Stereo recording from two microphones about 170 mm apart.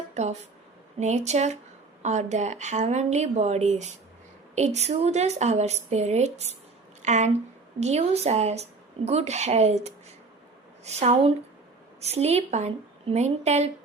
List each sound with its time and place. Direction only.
0.1 s a woman's voice: 40° right (ahead or behind)